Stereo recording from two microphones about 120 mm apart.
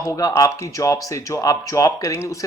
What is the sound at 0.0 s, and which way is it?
Speech, 30° left (ahead or behind).